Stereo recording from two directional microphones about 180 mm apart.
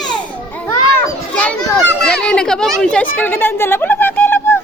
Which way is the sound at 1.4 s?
5° left (ahead or behind).